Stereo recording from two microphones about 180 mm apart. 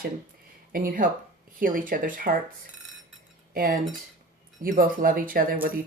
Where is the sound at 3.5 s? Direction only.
50° right (ahead or behind).